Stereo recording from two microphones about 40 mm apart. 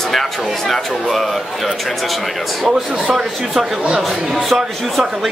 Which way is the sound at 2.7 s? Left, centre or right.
Centre.